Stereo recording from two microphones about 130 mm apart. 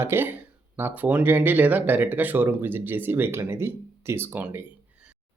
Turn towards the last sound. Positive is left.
turn(degrees=-15)  # may be behind; listen again after turning